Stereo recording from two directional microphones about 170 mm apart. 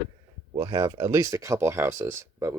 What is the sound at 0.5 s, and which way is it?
Speech, 25° right (ahead or behind).